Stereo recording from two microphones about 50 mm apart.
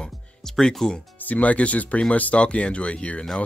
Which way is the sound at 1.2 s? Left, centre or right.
Left.